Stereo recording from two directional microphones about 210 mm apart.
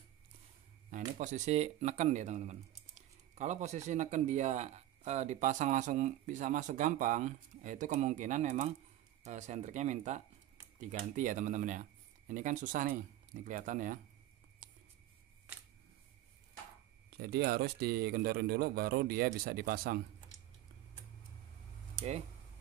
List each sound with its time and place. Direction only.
0.8 s speech: 40° right (ahead or behind)
17.2 s a man's voice: 50° right (ahead or behind)